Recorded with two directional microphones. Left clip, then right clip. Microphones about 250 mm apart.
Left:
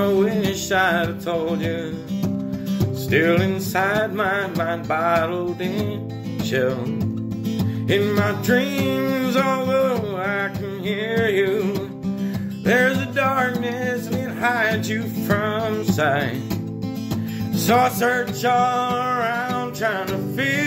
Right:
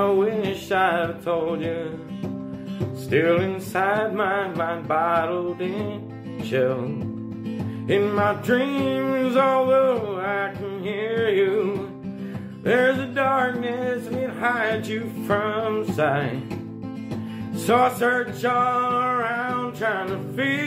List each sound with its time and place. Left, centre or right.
0.0 s music: left
3.1 s music: left
7.9 s music: left
12.6 s music: left
17.6 s music: left